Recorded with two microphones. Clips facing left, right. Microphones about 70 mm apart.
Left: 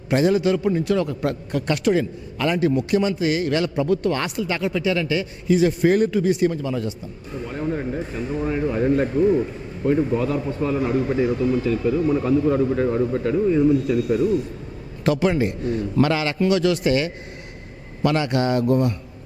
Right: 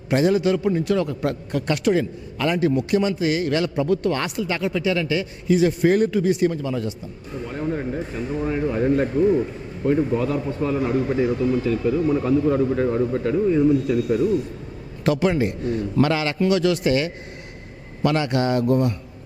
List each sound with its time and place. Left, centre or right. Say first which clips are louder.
0.1 s a man's voice: even; centre